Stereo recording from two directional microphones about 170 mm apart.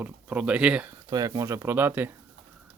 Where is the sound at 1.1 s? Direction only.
20° right (ahead or behind).